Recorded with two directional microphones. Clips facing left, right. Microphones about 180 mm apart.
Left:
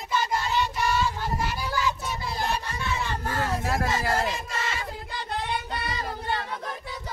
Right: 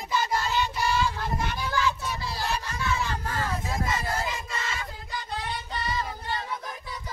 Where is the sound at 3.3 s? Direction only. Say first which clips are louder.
Left 3 dB; 70° left (ahead or behind).